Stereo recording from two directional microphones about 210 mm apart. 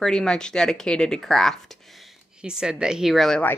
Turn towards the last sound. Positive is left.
turn(degrees=5)  # may be behind; listen again after turning